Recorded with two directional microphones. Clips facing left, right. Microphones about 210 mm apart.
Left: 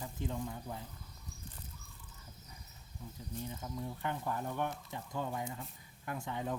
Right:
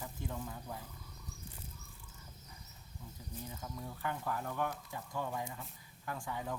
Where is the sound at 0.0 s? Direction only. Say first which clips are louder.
Left 3 dB; 20° left (ahead or behind).